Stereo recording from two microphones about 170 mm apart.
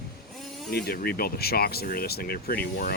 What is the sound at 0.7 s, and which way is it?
Speech, 65° left (ahead or behind).